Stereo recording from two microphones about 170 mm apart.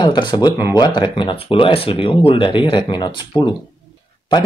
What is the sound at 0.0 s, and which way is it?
Speech, 25° left (ahead or behind).